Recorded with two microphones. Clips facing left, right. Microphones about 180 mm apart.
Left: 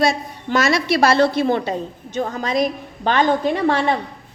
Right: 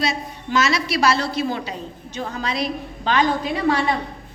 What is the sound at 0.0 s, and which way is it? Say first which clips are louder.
A woman's voice: left 6 dB; 50° left (ahead or behind).